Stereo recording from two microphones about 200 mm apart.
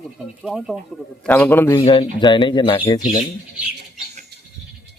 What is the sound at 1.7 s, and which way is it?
Speech, 25° left (ahead or behind).